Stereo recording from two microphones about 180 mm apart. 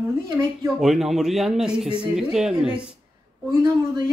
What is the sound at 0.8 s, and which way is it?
A man's voice, centre (ahead or behind).